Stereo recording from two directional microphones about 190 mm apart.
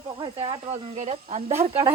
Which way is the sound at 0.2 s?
25° right (ahead or behind).